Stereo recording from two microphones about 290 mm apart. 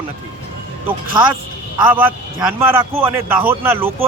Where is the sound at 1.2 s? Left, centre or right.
Centre.